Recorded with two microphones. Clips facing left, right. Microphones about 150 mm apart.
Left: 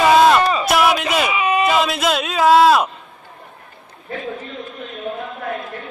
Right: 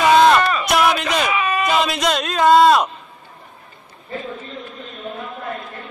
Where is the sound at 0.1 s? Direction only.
5° left (ahead or behind).